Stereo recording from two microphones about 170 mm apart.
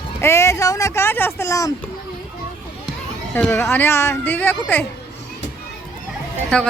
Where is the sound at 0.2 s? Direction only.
15° left (ahead or behind).